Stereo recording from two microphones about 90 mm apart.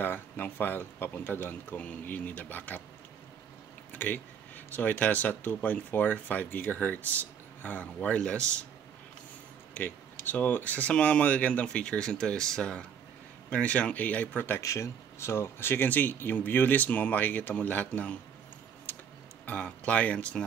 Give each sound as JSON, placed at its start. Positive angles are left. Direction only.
{"t": 0.0, "sound": "speech", "side_deg": 20}
{"t": 3.9, "sound": "speech", "side_deg": 20}
{"t": 9.8, "sound": "speech", "side_deg": 20}
{"t": 14.6, "sound": "speech", "side_deg": 35}
{"t": 18.9, "sound": "tick-tock", "side_deg": 20}
{"t": 19.4, "sound": "speech", "side_deg": 15}